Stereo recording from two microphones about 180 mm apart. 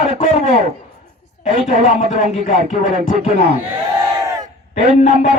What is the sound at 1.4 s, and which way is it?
Speech, 40° left (ahead or behind).